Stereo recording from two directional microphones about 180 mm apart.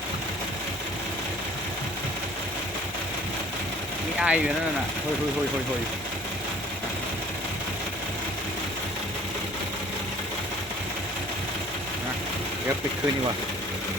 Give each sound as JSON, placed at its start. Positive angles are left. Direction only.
{"t": 4.2, "sound": "speech", "side_deg": -5}